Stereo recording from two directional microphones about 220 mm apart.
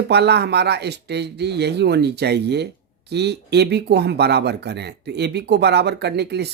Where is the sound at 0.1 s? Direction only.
50° right (ahead or behind).